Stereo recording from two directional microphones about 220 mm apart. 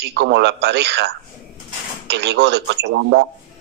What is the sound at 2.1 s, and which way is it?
A man's voice, 50° right (ahead or behind).